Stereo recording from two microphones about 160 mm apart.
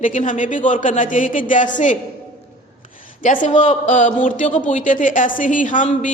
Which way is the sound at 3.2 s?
50° left (ahead or behind).